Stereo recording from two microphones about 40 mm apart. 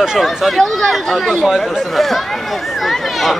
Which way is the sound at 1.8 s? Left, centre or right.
Centre.